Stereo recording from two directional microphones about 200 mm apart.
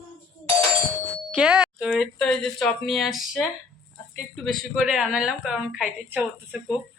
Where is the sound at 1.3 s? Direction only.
5° right (ahead or behind).